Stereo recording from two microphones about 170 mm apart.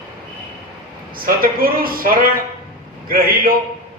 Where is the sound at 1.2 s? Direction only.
60° right (ahead or behind).